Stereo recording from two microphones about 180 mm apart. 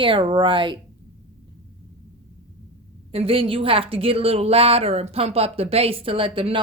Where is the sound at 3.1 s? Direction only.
30° right (ahead or behind).